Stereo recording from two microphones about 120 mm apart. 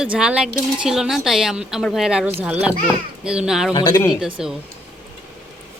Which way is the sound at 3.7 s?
40° left (ahead or behind).